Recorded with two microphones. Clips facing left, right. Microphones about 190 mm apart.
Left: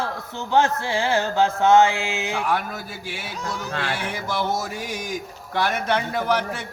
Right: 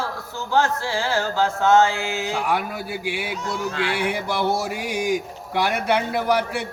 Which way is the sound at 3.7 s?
45° left (ahead or behind).